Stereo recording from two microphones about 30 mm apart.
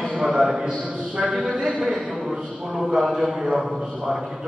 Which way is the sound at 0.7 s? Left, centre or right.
Right.